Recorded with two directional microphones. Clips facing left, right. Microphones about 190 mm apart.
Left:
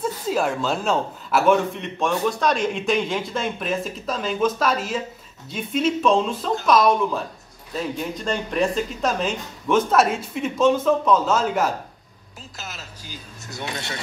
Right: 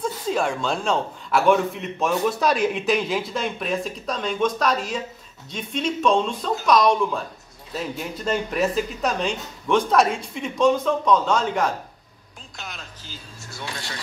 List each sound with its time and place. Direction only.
0.0 s a man's voice: 5° left (ahead or behind)
8.1 s a man's voice: 5° right (ahead or behind)
13.1 s speech: 20° left (ahead or behind)